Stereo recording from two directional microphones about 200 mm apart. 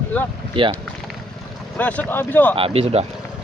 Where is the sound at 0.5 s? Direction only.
25° right (ahead or behind).